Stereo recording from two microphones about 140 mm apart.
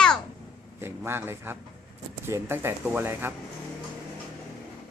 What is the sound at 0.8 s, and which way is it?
A man's voice, 15° right (ahead or behind).